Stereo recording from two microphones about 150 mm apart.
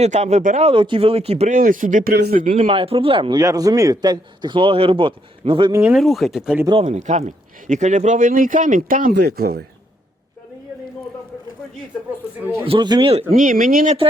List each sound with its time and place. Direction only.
0.0 s speech: 50° right (ahead or behind)
0.7 s a man's voice: 35° right (ahead or behind)
1.5 s speech: 65° right (ahead or behind)
2.6 s a man's voice: 40° right (ahead or behind)
5.9 s speech: centre (ahead or behind)
6.7 s speech: 40° right (ahead or behind); by 9.6 s 90° right
12.6 s a man's voice: 35° right (ahead or behind)
13.3 s speech: 65° right (ahead or behind)